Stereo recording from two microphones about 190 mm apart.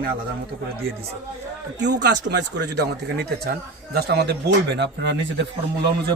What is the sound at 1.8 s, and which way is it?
A man's voice, 65° right (ahead or behind).